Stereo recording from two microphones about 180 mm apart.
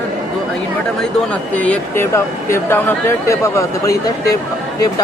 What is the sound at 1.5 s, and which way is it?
Speech, 10° left (ahead or behind).